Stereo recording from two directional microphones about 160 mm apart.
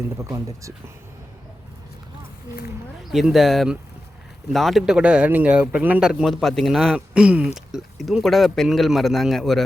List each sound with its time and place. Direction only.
0.2 s speech: 20° right (ahead or behind)
3.1 s speech: centre (ahead or behind)